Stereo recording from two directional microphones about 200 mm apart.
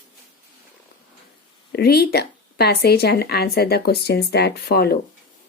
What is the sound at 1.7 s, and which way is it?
Speech, 50° left (ahead or behind).